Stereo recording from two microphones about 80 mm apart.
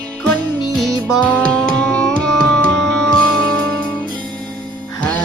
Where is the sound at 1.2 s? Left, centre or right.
Centre.